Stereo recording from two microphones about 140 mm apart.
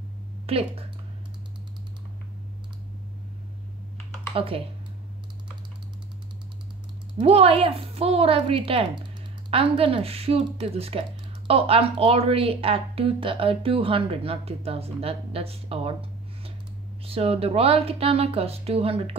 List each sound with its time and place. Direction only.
0.5 s speech: 45° right (ahead or behind)
4.3 s speech: 40° right (ahead or behind)
7.2 s speech: 40° right (ahead or behind)